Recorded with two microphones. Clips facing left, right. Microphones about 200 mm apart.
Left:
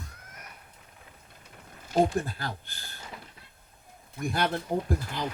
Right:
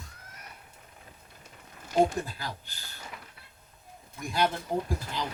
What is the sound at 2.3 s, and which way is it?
Speech, 55° left (ahead or behind).